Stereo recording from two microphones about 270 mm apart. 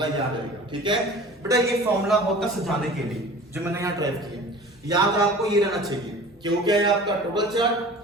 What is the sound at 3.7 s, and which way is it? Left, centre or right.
A man's voice, centre.